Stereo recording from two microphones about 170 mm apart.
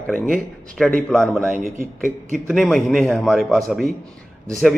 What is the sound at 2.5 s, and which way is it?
A man's voice, centre (ahead or behind).